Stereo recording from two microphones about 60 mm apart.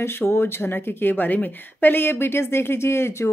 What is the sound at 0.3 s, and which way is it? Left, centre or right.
Speech, left.